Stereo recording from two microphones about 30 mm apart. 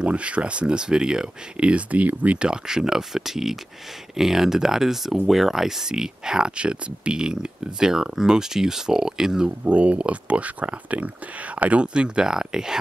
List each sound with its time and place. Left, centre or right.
0.0 s speech: right
1.6 s speech: right
1.9 s speech: right
2.3 s speech: right
6.5 s speech: right; by 9.5 s centre
9.7 s speech: right
11.8 s speech: right
12.3 s speech: right